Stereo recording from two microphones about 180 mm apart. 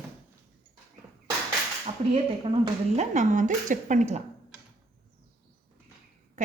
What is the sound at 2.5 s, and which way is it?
A woman's voice, 40° right (ahead or behind).